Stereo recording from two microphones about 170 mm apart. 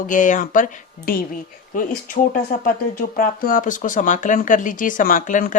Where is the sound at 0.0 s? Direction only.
50° left (ahead or behind).